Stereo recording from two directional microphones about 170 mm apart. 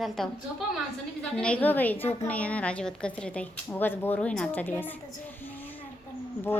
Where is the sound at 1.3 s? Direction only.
5° left (ahead or behind).